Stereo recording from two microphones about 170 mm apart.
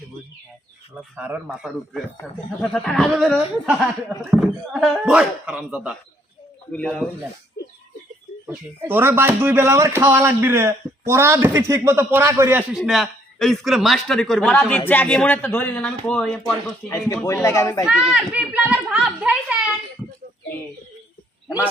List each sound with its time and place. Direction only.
0.9 s a man's voice: 10° right (ahead or behind)
6.7 s speech: 5° left (ahead or behind)
8.4 s speech: 10° right (ahead or behind)
12.7 s a man's voice: centre (ahead or behind)
17.2 s a man's voice: 20° left (ahead or behind)
17.8 s a child's voice: 5° right (ahead or behind)